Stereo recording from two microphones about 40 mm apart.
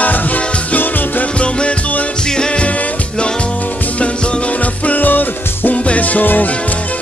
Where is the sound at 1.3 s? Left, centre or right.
Left.